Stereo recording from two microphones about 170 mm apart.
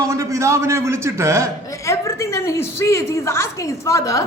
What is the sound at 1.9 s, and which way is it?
A man's voice, 15° left (ahead or behind).